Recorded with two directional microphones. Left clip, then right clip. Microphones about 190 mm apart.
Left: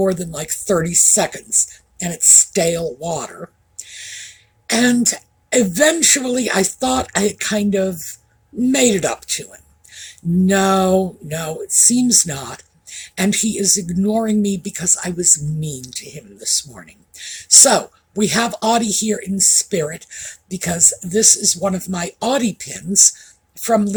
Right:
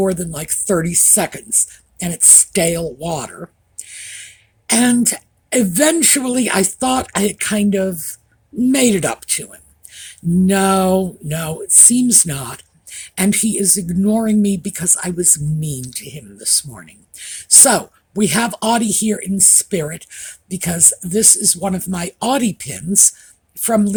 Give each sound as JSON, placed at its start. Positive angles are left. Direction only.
{"t": 0.0, "sound": "speech", "side_deg": -50}